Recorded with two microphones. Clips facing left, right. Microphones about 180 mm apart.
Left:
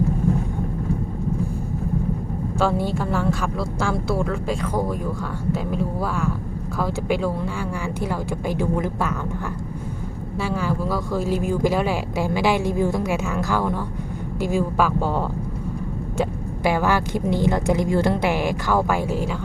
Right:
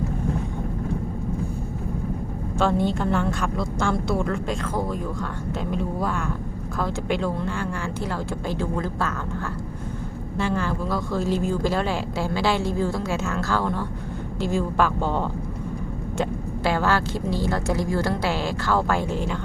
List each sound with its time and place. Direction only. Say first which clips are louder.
2.6 s a man's voice: even; 5° left (ahead or behind)
10.3 s a man's voice: left 1 dB; 10° left (ahead or behind)
16.6 s a man's voice: left 2 dB; 15° left (ahead or behind)